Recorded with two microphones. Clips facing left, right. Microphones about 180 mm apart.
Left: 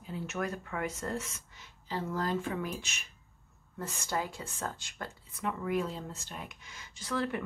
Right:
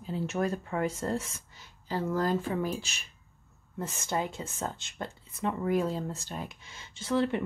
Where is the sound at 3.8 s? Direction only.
20° right (ahead or behind).